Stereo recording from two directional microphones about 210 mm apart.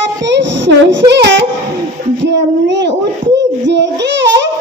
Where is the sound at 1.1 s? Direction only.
55° right (ahead or behind).